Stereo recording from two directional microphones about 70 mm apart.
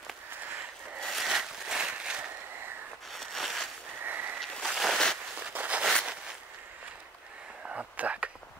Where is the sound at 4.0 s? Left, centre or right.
Right.